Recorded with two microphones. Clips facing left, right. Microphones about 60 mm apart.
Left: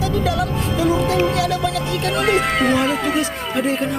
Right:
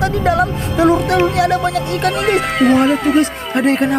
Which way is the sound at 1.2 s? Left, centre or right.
Right.